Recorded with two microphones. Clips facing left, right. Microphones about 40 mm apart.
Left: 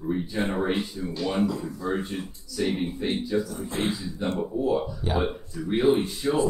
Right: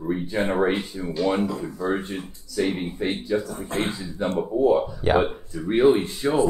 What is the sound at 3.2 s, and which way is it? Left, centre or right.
A man's voice, right.